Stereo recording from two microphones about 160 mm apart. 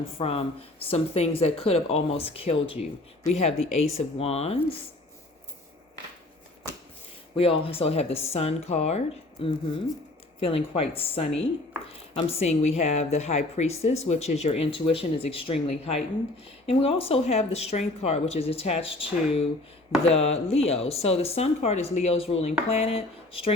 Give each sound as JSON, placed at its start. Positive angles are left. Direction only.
{"t": 0.2, "sound": "a woman's voice", "side_deg": 35}
{"t": 7.3, "sound": "a woman's voice", "side_deg": 35}